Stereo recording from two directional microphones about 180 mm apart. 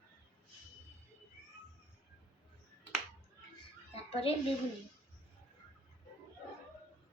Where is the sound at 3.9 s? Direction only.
35° left (ahead or behind).